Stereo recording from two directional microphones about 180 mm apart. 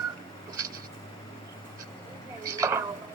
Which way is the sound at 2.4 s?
15° right (ahead or behind).